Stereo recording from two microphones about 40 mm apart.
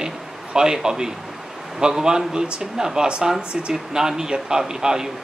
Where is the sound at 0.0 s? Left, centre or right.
Centre.